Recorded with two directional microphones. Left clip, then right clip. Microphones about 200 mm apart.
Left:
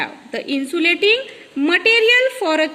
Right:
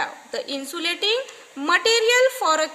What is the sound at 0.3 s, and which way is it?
A woman's voice, 50° right (ahead or behind).